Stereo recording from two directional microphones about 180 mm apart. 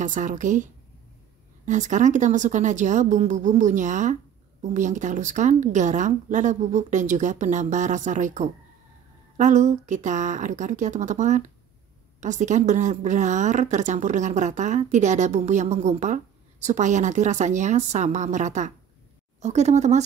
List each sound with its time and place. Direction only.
0.0 s a woman's voice: 45° right (ahead or behind)
1.7 s a woman's voice: 45° right (ahead or behind)